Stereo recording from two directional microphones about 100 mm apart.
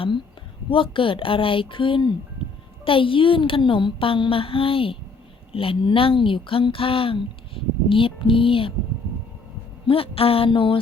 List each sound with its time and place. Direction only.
0.7 s speech: 60° left (ahead or behind)
9.8 s speech: 65° left (ahead or behind)